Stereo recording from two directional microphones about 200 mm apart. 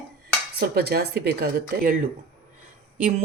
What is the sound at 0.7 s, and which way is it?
Speech, 50° right (ahead or behind).